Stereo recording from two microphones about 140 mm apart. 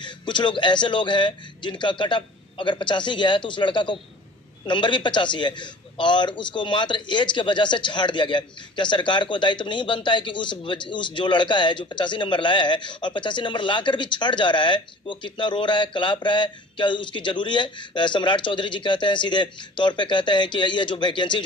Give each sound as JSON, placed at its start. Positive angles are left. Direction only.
{"t": 0.0, "sound": "a man's voice", "side_deg": 35}